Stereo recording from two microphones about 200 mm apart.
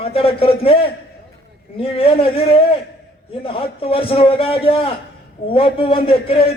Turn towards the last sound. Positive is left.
turn(degrees=30)  # may be behind; listen again after turning